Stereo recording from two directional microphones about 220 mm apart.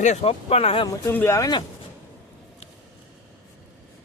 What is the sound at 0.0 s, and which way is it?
Speech, 30° left (ahead or behind).